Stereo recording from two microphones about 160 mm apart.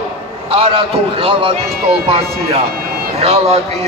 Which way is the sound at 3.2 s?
40° right (ahead or behind).